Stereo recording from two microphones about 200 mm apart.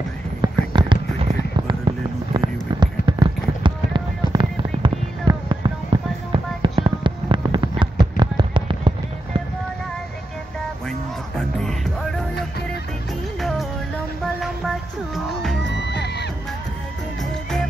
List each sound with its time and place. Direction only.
0.4 s fireworks: 20° right (ahead or behind)
10.9 s music: 5° left (ahead or behind)
15.8 s music: 60° left (ahead or behind)
17.2 s music: centre (ahead or behind)